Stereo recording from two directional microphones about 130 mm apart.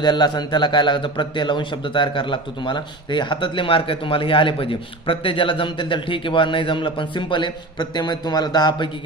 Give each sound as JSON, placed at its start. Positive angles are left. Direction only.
{"t": 0.0, "sound": "a man's voice", "side_deg": 35}